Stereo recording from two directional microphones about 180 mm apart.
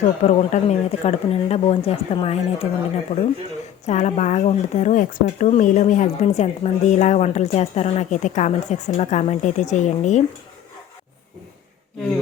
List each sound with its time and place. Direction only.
0.0 s speech: 40° left (ahead or behind)
3.8 s speech: 40° left (ahead or behind)